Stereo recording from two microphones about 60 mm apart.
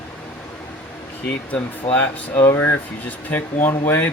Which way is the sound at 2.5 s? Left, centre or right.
Left.